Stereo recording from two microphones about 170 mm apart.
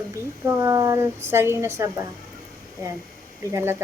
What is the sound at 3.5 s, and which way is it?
Speech, 15° right (ahead or behind).